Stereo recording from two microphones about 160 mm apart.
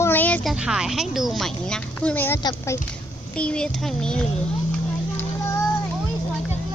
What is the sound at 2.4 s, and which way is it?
Speech, 25° left (ahead or behind).